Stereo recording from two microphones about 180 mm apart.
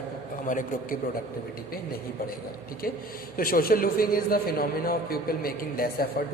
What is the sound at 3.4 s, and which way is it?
A man's voice, 55° left (ahead or behind).